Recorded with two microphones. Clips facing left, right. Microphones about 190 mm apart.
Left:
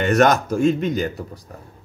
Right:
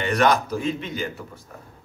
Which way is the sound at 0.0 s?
45° left (ahead or behind).